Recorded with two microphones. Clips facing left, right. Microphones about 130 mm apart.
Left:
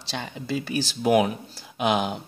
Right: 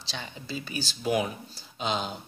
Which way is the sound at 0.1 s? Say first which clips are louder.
Left 8 dB; 60° left (ahead or behind).